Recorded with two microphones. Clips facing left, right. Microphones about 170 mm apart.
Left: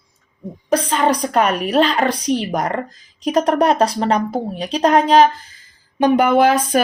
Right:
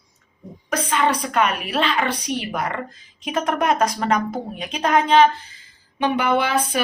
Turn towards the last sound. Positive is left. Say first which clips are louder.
# left 7 dB
turn(degrees=45)  # may be behind; listen again after turning